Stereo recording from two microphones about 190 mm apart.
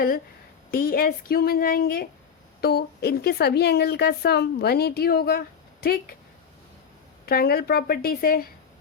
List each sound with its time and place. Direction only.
0.7 s a woman's voice: 50° left (ahead or behind)
7.3 s speech: 55° left (ahead or behind)